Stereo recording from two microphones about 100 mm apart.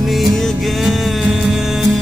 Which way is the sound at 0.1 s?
Centre (ahead or behind).